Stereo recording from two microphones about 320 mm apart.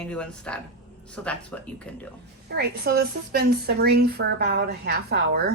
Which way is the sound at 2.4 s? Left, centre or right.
Right.